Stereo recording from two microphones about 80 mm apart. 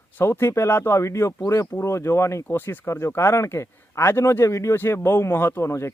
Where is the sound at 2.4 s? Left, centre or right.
Left.